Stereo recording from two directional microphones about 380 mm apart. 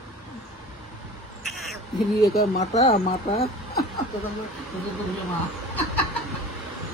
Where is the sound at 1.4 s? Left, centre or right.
Centre.